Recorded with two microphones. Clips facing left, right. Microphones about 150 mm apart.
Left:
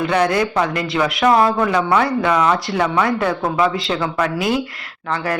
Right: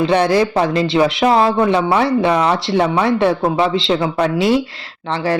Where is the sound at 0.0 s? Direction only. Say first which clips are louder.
Right 3 dB; 30° right (ahead or behind).